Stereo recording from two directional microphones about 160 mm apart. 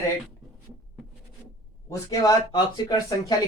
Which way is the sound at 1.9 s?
25° left (ahead or behind).